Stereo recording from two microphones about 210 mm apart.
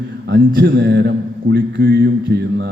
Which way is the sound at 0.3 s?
50° right (ahead or behind).